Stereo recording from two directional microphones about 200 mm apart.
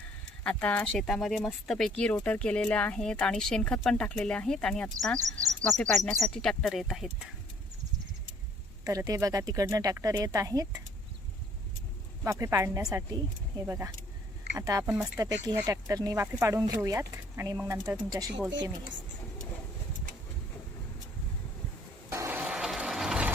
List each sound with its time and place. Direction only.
0.4 s speech: 5° left (ahead or behind)
8.8 s speech: 15° right (ahead or behind)
12.2 s speech: 15° right (ahead or behind)
22.1 s a sound: 10° right (ahead or behind)